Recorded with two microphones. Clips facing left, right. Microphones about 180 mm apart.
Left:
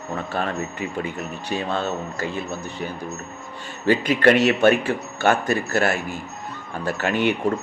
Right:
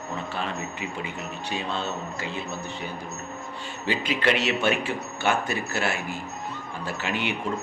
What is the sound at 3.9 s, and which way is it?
Speech, 50° left (ahead or behind).